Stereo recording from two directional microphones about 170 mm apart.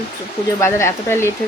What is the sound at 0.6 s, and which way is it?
Speech, 15° left (ahead or behind).